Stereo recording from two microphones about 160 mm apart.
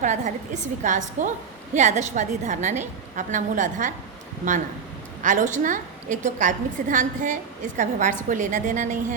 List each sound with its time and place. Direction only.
0.0 s a woman's voice: 50° right (ahead or behind)
5.2 s a woman's voice: 50° right (ahead or behind)